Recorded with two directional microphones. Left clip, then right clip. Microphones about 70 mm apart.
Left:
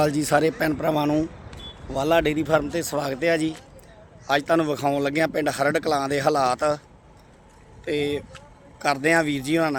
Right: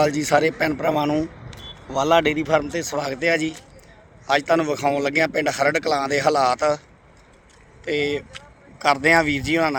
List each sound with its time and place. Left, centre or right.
0.0 s a man's voice: centre
7.9 s speech: centre